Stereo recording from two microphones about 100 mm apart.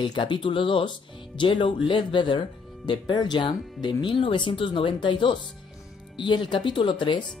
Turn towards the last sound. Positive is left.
turn(degrees=50)  # may be behind; listen again after turning